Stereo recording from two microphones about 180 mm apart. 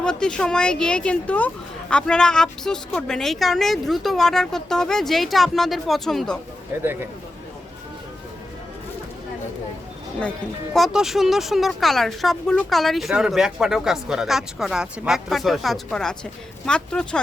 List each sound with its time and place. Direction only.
0.0 s speech: 5° left (ahead or behind)
10.8 s speech: centre (ahead or behind)